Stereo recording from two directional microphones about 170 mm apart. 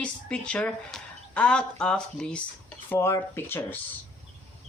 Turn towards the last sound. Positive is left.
turn(degrees=15)  # may be behind; listen again after turning